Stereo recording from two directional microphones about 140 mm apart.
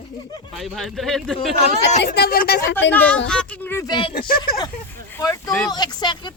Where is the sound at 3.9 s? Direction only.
40° left (ahead or behind).